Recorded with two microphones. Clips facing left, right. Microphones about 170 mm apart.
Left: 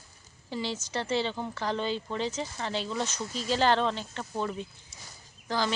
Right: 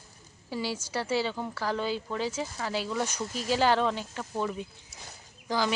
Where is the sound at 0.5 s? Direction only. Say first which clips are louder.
Right 1 dB; 10° right (ahead or behind).